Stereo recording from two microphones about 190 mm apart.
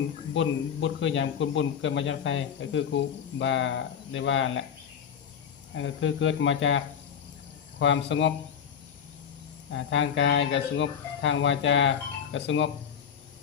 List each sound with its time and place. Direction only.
0.3 s a man's voice: 80° left
5.7 s a man's voice: 90° left
9.7 s a man's voice: 80° left